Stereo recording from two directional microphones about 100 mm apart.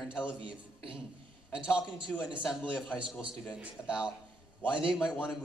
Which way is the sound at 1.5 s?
10° right (ahead or behind).